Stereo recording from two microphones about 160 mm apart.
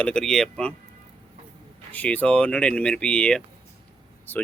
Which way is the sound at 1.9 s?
10° left (ahead or behind).